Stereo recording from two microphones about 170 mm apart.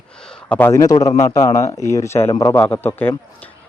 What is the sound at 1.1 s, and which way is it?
Speech, 35° left (ahead or behind).